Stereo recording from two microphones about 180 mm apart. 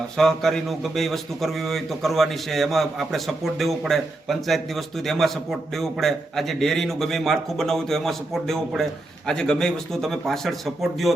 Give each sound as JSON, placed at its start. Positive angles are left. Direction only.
{"t": 0.2, "sound": "a man's voice", "side_deg": 0}